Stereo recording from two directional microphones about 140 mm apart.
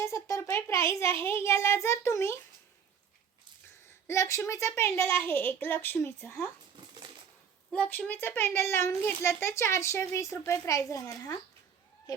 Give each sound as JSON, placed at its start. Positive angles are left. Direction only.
{"t": 0.0, "sound": "a child's voice", "side_deg": 20}
{"t": 4.0, "sound": "a woman's voice", "side_deg": 20}
{"t": 7.7, "sound": "a child's voice", "side_deg": 10}